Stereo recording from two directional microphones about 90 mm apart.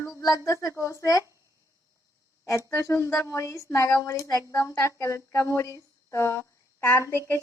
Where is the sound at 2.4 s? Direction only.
35° left (ahead or behind).